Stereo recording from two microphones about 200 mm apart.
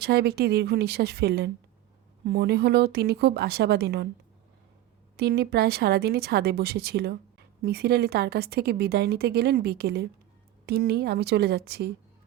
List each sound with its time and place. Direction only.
0.0 s a woman's voice: 55° right (ahead or behind)
5.1 s a woman's voice: 55° right (ahead or behind)